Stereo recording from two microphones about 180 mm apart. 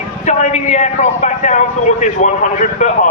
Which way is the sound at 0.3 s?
40° left (ahead or behind).